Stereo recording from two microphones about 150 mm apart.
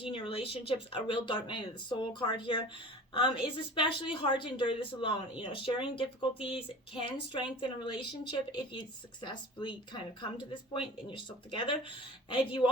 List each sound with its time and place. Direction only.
0.0 s speech: 35° left (ahead or behind)